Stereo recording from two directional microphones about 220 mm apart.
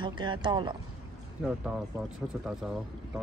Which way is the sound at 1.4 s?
5° right (ahead or behind).